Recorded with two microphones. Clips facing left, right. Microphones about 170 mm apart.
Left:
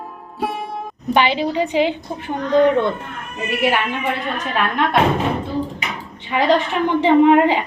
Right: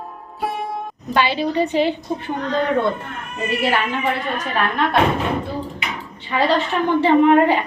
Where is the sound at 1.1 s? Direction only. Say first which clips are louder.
Left 2 dB; 15° left (ahead or behind).